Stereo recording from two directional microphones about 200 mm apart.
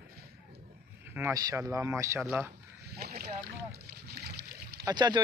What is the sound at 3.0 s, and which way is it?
Boat, 50° right (ahead or behind).